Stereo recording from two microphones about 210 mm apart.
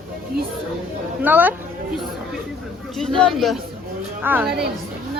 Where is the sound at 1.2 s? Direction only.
10° right (ahead or behind).